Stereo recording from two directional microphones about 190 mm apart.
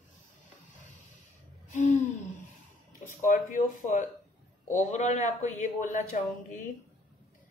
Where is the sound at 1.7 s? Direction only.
40° left (ahead or behind).